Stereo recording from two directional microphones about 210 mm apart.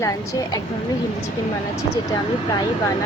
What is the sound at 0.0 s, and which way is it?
Speech, 15° left (ahead or behind).